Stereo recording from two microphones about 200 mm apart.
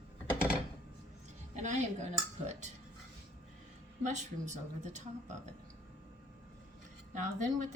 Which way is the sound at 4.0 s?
35° right (ahead or behind).